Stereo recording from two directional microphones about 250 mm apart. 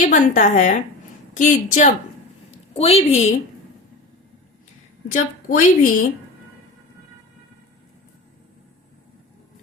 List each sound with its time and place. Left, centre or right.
0.0 s a woman's voice: left
5.1 s a woman's voice: left